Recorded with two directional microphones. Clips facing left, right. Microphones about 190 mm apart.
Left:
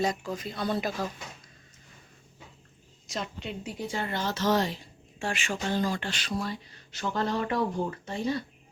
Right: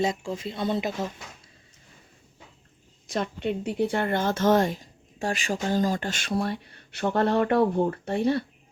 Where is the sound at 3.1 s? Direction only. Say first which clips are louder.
Right 8 dB; 55° right (ahead or behind).